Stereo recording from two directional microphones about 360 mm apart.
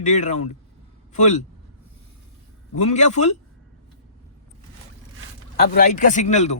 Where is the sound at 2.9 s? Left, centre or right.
Centre.